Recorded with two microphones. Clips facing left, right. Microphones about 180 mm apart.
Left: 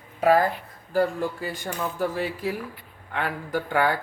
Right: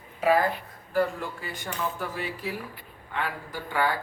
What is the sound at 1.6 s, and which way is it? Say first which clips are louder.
Speech: left 4 dB; 35° left (ahead or behind).